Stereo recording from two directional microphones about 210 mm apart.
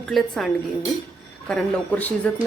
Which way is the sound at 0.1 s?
Centre (ahead or behind).